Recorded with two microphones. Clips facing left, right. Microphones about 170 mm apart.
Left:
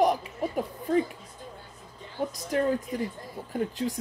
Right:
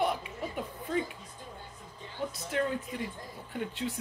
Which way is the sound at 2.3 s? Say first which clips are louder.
Left 6 dB; 35° left (ahead or behind).